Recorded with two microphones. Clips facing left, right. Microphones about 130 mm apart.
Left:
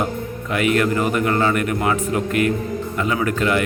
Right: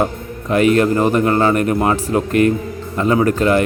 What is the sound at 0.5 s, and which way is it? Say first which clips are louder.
A man's voice: right 5 dB; 35° right (ahead or behind).